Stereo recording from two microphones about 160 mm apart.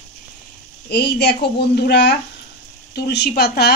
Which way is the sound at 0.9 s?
90° left.